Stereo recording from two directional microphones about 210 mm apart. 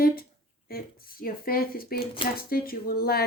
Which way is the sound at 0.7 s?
45° left (ahead or behind).